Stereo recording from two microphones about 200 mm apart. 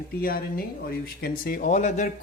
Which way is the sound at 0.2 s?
50° left (ahead or behind).